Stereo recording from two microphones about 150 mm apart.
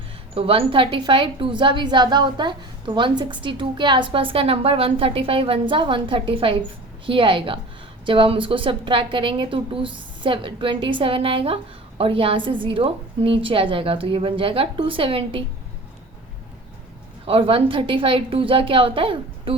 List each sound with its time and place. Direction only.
0.3 s a woman's voice: 35° right (ahead or behind)
17.2 s a woman's voice: 40° right (ahead or behind)